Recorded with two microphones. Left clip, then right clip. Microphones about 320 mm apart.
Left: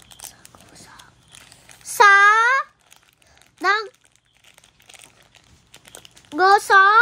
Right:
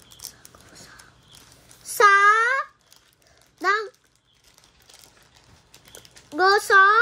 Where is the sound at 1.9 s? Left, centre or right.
Centre.